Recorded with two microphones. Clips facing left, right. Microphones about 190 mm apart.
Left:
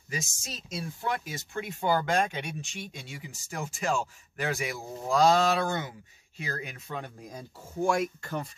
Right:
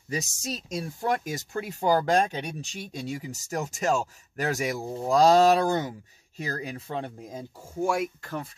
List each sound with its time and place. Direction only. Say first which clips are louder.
0.1 s speech: right 6 dB; 40° right (ahead or behind)
7.8 s speech: even; 5° right (ahead or behind)